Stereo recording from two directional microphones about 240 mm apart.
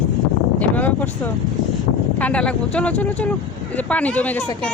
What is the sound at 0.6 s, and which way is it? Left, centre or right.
Speech, centre.